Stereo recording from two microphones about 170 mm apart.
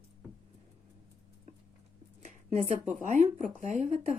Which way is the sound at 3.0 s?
45° right (ahead or behind).